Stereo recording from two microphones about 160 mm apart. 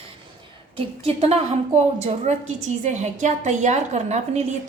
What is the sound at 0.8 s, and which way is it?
A woman's voice, 35° right (ahead or behind).